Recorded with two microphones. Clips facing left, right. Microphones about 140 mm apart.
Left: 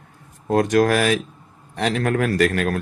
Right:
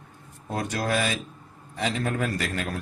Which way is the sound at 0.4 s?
80° left.